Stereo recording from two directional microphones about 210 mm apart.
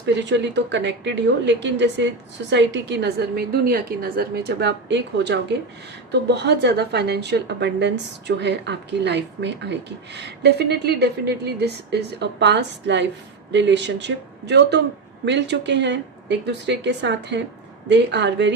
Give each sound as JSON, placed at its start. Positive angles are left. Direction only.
{"t": 0.2, "sound": "a woman's voice", "side_deg": -55}